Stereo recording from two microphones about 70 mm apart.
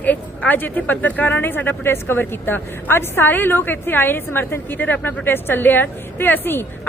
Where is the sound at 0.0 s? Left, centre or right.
Left.